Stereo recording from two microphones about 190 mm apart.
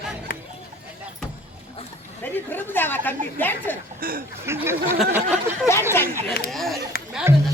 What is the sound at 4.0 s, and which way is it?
Speech, 50° right (ahead or behind).